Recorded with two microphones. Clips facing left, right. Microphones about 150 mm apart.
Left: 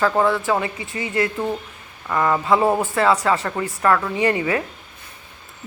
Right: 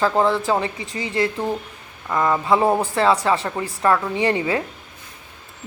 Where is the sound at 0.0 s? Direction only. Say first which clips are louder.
Even; 20° right (ahead or behind).